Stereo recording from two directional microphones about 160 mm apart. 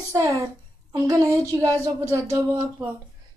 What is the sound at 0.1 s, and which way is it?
Speech, 20° right (ahead or behind).